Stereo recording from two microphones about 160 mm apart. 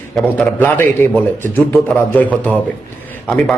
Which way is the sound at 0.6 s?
15° left (ahead or behind).